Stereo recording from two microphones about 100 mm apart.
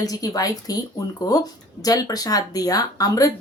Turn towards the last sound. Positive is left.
turn(degrees=35)  # may be behind; listen again after turning